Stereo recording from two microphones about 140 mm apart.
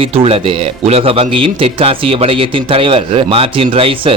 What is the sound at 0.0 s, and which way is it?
A man's voice, 40° right (ahead or behind).